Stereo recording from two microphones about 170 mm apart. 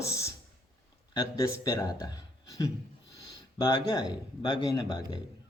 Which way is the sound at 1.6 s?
20° left (ahead or behind).